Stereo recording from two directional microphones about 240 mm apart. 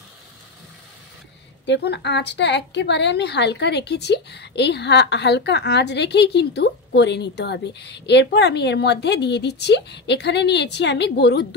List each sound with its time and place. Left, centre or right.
1.7 s a woman's voice: left